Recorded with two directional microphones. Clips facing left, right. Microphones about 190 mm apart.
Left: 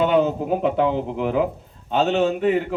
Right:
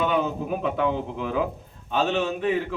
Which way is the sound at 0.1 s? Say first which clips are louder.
Left 6 dB; 30° left (ahead or behind).